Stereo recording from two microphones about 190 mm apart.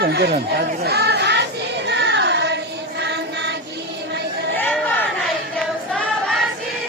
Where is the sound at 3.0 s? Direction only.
65° right (ahead or behind).